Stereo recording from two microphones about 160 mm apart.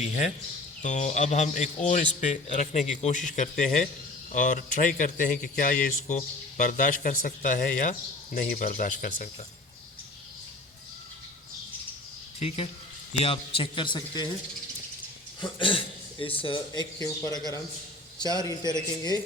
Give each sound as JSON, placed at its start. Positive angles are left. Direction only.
{"t": 0.8, "sound": "speech", "side_deg": 50}
{"t": 12.4, "sound": "a man's voice", "side_deg": 40}
{"t": 15.5, "sound": "a man's voice", "side_deg": 30}